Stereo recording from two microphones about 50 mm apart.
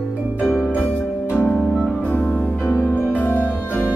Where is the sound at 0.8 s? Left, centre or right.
Left.